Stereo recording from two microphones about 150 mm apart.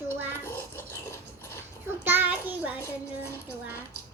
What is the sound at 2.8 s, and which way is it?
Dishes, 15° left (ahead or behind).